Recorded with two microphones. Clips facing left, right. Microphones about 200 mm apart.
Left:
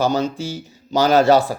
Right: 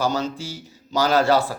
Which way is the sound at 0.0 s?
20° left (ahead or behind).